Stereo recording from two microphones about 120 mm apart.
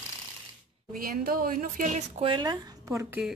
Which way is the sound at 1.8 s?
80° right.